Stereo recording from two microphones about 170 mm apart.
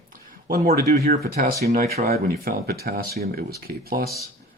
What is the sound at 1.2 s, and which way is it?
Speech, 60° right (ahead or behind).